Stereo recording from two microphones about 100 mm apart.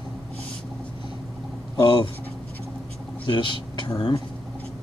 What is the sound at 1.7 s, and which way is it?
Speech, 55° left (ahead or behind).